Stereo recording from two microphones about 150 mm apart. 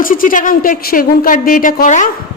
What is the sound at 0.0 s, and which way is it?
Speech, 65° left (ahead or behind).